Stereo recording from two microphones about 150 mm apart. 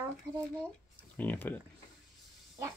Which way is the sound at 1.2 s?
10° left (ahead or behind).